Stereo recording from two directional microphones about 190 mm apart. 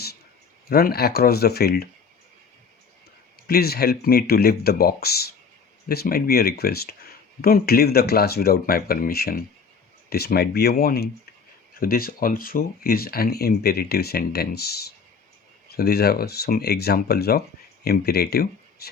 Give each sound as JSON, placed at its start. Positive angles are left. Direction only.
{"t": 0.7, "sound": "speech", "side_deg": 55}
{"t": 3.4, "sound": "speech", "side_deg": 55}